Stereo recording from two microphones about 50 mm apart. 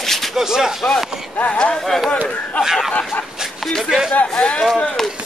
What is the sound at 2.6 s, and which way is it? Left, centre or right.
A man's voice, centre.